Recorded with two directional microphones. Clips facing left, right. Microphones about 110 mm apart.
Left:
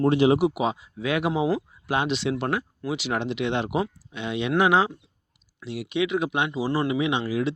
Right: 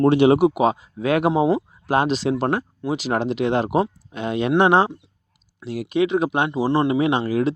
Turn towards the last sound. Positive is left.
turn(degrees=-45)  # may be behind; listen again after turning